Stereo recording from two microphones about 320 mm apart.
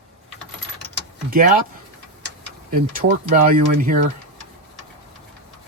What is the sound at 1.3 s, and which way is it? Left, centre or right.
Speech, right.